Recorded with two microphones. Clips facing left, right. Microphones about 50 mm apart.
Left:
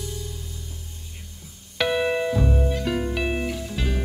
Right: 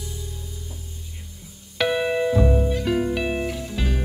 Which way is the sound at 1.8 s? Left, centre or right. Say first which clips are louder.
Right 1 dB; centre.